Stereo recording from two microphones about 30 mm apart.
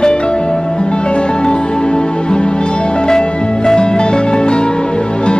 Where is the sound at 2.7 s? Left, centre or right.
Left.